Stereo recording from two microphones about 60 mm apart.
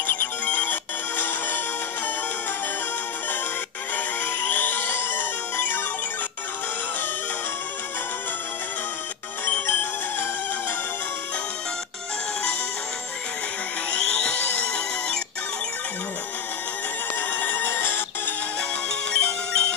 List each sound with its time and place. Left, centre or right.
0.0 s music: left
3.9 s music: left
9.5 s music: left
13.8 s music: centre
17.3 s music: left
19.1 s music: centre